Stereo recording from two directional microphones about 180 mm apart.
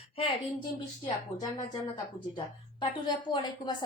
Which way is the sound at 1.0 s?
20° left (ahead or behind).